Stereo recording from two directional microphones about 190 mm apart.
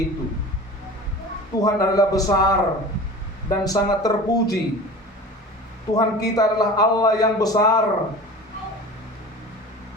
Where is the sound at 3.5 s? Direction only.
20° left (ahead or behind).